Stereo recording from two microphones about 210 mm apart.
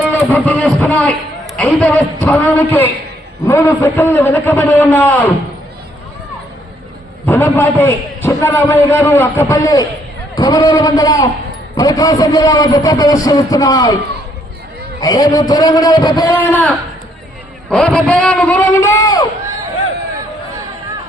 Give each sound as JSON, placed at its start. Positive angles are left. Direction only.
{"t": 0.1, "sound": "a man's voice", "side_deg": 10}
{"t": 7.3, "sound": "a man's voice", "side_deg": 10}
{"t": 15.0, "sound": "a man's voice", "side_deg": 15}
{"t": 16.5, "sound": "a man's voice", "side_deg": 10}